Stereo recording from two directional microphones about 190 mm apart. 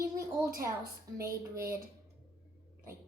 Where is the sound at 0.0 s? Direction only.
15° right (ahead or behind).